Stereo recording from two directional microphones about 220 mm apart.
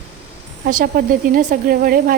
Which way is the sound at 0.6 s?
40° right (ahead or behind).